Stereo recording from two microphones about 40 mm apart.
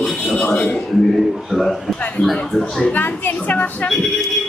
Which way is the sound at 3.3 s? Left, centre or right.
Left.